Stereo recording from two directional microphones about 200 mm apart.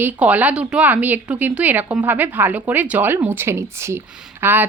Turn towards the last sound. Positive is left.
turn(degrees=-10)  # may be behind; listen again after turning